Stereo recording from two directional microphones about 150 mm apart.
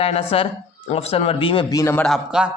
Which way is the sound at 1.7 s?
20° left (ahead or behind).